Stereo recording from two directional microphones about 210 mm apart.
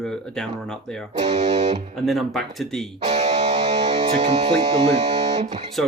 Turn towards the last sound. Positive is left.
turn(degrees=-30)  # may be behind; listen again after turning